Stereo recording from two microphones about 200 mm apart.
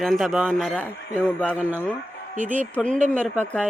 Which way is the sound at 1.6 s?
10° right (ahead or behind).